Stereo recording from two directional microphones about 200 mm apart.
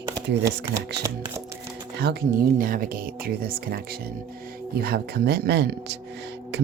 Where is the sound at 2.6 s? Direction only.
45° right (ahead or behind).